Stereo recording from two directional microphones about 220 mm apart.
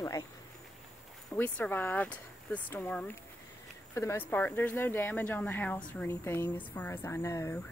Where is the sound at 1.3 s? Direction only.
5° left (ahead or behind).